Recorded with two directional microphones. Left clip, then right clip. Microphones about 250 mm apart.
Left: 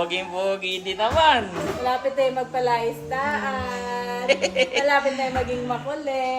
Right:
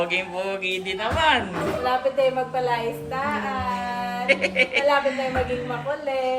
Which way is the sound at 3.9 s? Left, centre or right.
Left.